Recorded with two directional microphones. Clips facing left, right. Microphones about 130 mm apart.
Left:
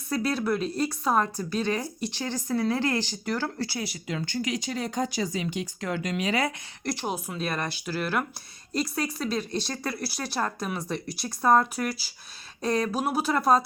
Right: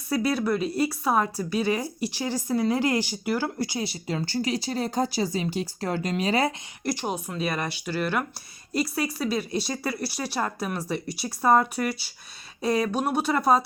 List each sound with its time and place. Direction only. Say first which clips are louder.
0.1 s speech: right 2 dB; 5° right (ahead or behind)
3.8 s speech: right 3 dB; 30° right (ahead or behind)
6.8 s speech: right 2 dB; centre (ahead or behind)